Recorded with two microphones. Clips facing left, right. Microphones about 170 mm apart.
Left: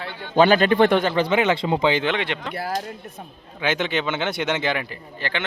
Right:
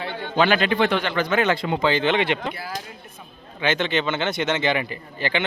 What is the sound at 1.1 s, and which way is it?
Speech, 30° left (ahead or behind).